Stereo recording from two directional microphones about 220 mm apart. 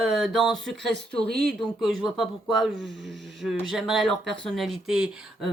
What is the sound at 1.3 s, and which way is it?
Speech, 45° right (ahead or behind).